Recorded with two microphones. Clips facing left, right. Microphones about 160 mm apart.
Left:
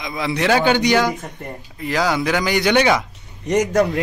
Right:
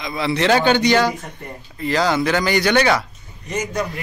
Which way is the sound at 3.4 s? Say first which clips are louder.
Left 7 dB; 75° left (ahead or behind).